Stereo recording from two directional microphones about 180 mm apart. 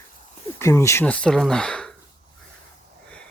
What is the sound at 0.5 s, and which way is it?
Speech, 15° left (ahead or behind).